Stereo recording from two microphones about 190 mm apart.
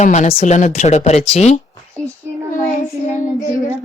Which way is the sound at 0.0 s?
40° left (ahead or behind).